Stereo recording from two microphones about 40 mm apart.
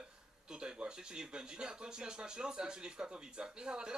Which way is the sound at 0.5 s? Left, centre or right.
Right.